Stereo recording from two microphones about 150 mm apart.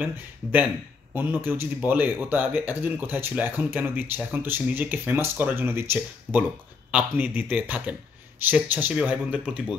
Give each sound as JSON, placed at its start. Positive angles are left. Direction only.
{"t": 0.0, "sound": "speech", "side_deg": -10}